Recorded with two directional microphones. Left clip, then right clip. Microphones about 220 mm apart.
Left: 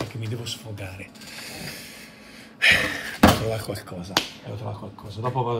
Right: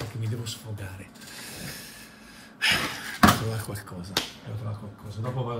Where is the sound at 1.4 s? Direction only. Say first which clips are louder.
Left 4 dB; 5° left (ahead or behind).